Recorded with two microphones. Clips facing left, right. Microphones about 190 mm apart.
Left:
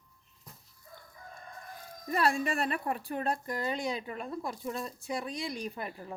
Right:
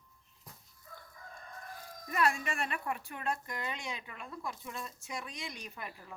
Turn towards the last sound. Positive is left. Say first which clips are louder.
# left 8 dB
turn(degrees=35)  # may be behind; listen again after turning